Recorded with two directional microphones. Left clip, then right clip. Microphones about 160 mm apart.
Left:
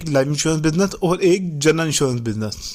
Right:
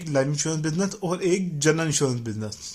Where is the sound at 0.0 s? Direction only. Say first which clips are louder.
Left 6 dB; 55° left (ahead or behind).